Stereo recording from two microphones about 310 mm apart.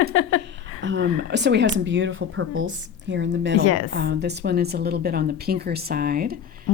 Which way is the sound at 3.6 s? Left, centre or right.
Left.